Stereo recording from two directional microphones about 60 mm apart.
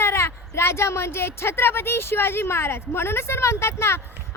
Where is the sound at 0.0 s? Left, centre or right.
Left.